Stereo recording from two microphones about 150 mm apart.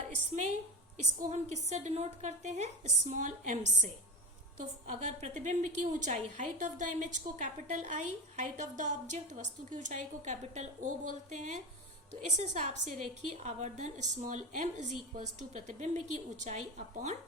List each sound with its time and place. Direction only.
1.2 s a woman's voice: 50° right (ahead or behind)